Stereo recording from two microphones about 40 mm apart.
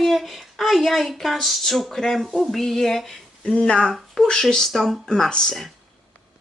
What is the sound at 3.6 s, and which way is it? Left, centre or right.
Speech, centre.